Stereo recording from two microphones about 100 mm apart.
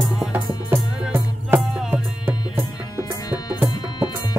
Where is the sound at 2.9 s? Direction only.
40° left (ahead or behind).